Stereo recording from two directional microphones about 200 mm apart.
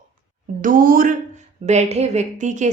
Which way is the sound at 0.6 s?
45° right (ahead or behind).